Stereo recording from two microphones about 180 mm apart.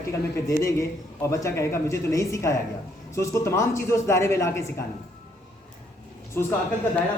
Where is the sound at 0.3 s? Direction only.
15° left (ahead or behind).